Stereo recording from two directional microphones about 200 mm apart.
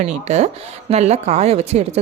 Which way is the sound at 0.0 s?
35° right (ahead or behind).